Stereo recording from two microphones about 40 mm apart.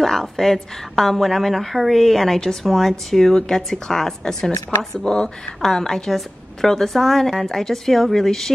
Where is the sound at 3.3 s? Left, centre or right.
Centre.